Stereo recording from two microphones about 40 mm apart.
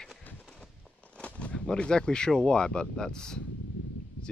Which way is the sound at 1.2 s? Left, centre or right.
Left.